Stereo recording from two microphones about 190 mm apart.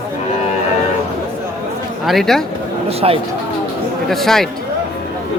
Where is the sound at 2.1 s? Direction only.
Centre (ahead or behind).